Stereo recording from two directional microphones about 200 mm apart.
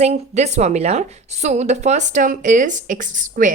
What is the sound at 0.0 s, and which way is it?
Speech, 35° right (ahead or behind).